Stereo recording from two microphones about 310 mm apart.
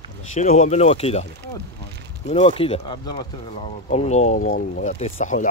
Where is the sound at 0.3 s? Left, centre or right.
Left.